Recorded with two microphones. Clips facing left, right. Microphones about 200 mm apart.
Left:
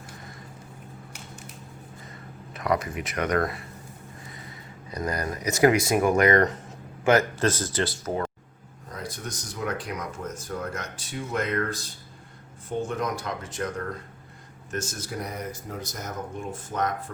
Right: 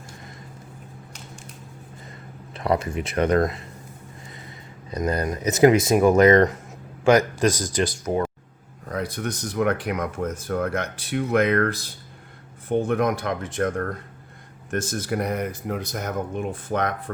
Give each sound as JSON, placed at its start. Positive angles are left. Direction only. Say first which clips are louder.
{"t": 2.5, "sound": "speech", "louder": "right 3 dB", "side_deg": -30}
{"t": 4.9, "sound": "speech", "louder": "right 5 dB", "side_deg": -25}
{"t": 8.9, "sound": "speech", "louder": "right 8 dB", "side_deg": -65}